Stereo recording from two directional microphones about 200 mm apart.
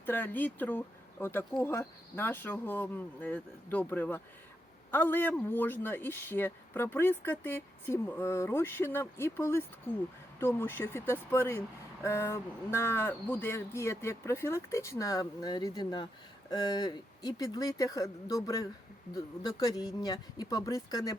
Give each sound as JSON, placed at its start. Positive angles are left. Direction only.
{"t": 0.0, "sound": "a man's voice", "side_deg": 10}